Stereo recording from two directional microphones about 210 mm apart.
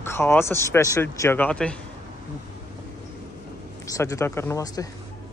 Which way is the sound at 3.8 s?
15° left (ahead or behind).